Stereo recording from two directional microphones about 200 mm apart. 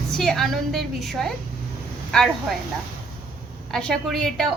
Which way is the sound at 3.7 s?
Centre (ahead or behind).